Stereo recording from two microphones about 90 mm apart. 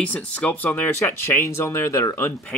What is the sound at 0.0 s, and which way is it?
Speech, 15° left (ahead or behind).